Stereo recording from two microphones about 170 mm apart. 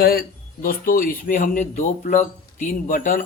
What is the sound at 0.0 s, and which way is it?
Speech, 65° left (ahead or behind).